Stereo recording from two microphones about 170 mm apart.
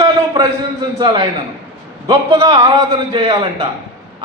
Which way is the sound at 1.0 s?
25° right (ahead or behind).